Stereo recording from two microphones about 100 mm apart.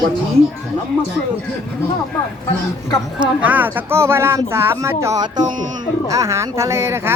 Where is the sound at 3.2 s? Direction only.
15° right (ahead or behind).